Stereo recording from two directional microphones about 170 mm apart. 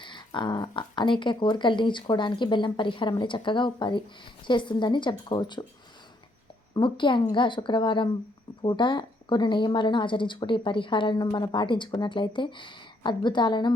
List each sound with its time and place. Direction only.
0.0 s a woman's voice: 30° left (ahead or behind)
6.7 s a woman's voice: 30° left (ahead or behind)